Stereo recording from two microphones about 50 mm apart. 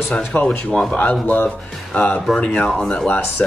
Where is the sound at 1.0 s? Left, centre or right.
Left; by 2.9 s centre.